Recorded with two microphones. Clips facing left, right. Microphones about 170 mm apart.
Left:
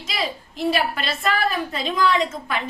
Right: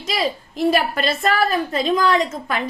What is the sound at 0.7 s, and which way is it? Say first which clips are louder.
A woman's voice: right 4 dB; 45° right (ahead or behind).